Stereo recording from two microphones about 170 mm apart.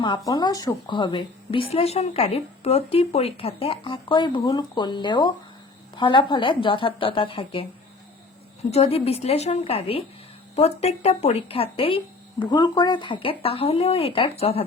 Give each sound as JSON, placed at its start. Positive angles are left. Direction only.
{"t": 0.3, "sound": "a woman's voice", "side_deg": 25}
{"t": 8.7, "sound": "speech", "side_deg": 35}